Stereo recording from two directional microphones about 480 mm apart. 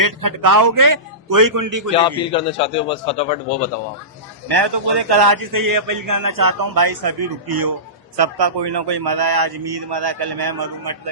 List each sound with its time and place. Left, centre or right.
0.0 s a man's voice: right
2.0 s a man's voice: centre
4.4 s a man's voice: right